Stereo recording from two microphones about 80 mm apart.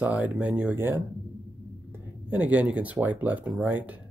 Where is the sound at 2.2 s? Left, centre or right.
Centre.